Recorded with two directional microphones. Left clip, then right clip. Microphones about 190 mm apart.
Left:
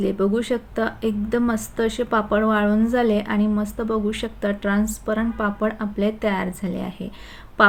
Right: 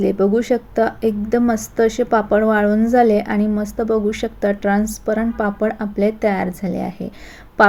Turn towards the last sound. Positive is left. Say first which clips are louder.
# right 3 dB
turn(degrees=-10)  # may be behind; listen again after turning